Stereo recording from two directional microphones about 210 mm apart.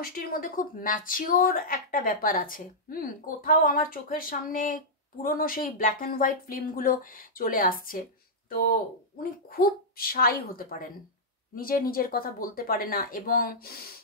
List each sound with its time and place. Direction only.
0.0 s speech: 40° left (ahead or behind)